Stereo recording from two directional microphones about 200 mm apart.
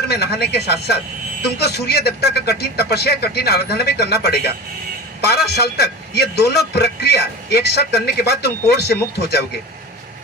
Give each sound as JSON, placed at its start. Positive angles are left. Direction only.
{"t": 0.1, "sound": "a man's voice", "side_deg": 55}